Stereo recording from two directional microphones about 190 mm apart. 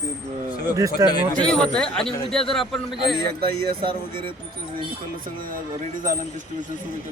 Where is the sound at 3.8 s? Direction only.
25° right (ahead or behind).